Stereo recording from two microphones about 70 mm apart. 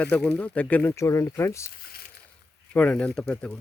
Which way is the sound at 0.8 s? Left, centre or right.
Left.